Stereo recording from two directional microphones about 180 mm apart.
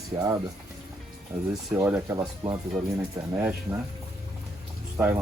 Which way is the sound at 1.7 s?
10° right (ahead or behind).